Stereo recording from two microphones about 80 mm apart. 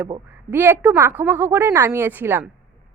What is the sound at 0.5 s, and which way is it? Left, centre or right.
A woman's voice, right.